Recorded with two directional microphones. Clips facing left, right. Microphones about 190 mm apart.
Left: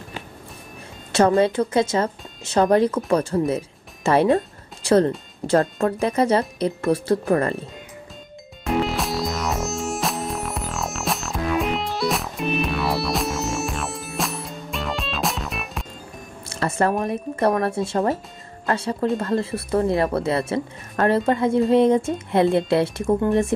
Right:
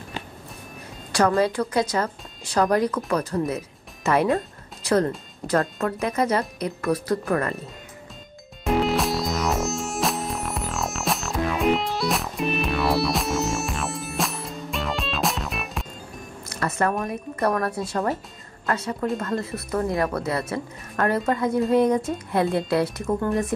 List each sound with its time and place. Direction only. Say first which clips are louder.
1.1 s speech: left 3 dB; 25° left (ahead or behind)
8.6 s music: right 1 dB; centre (ahead or behind)
16.4 s speech: left 3 dB; 30° left (ahead or behind)